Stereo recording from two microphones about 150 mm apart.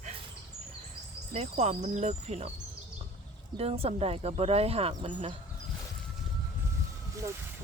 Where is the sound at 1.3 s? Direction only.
50° right (ahead or behind).